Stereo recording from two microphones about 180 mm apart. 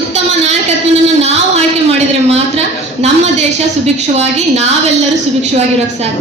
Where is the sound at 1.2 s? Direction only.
35° right (ahead or behind).